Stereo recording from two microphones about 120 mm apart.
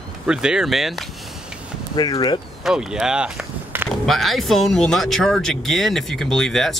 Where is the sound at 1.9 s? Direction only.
35° left (ahead or behind).